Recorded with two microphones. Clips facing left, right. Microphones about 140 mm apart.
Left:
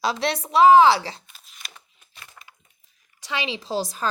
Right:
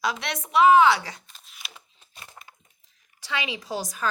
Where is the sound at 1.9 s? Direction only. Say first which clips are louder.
Right 1 dB; 30° right (ahead or behind).